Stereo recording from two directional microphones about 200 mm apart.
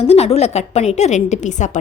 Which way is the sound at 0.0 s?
30° left (ahead or behind).